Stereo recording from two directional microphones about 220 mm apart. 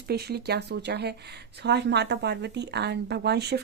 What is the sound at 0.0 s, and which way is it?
Speech, 45° right (ahead or behind).